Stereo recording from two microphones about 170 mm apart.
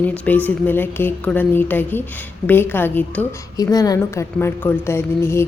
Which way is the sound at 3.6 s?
20° left (ahead or behind).